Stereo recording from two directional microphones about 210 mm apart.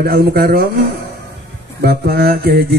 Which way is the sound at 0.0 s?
45° right (ahead or behind).